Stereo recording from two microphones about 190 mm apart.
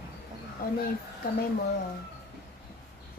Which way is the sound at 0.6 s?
50° left (ahead or behind).